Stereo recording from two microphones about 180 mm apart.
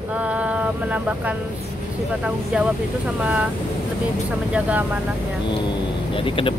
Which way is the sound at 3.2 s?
5° right (ahead or behind).